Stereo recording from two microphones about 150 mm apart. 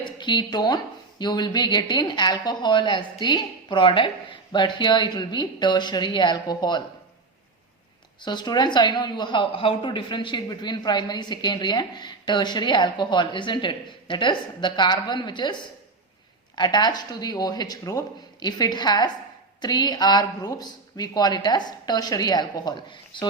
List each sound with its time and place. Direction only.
0.0 s a woman's voice: 30° left (ahead or behind)
8.2 s a woman's voice: 30° left (ahead or behind)
16.6 s a woman's voice: 30° left (ahead or behind)